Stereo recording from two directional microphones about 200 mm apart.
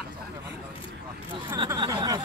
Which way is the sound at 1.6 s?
20° right (ahead or behind).